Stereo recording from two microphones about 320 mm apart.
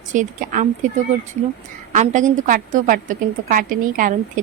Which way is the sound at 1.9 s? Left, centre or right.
Right.